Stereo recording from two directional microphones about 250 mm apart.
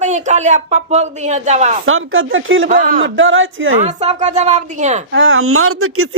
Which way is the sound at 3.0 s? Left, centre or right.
Right.